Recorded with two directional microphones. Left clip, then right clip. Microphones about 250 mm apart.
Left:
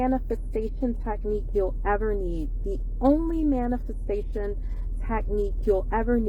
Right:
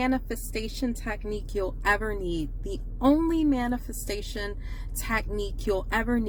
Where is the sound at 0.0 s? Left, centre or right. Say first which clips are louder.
Left 2 dB; right.